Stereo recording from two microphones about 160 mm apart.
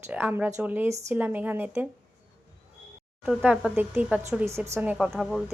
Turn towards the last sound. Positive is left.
turn(degrees=0)  # may be behind; listen again after turning